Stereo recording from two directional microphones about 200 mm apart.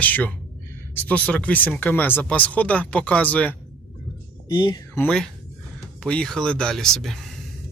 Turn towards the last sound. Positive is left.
turn(degrees=0)  # may be behind; listen again after turning